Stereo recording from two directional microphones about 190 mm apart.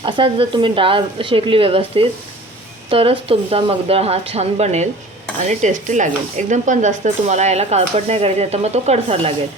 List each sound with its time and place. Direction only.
0.0 s speech: 25° right (ahead or behind)